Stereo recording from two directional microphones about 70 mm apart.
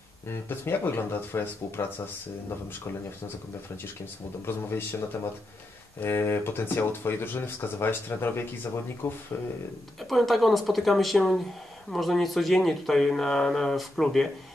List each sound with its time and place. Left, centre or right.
0.3 s speech: left
4.0 s speech: left
10.0 s speech: centre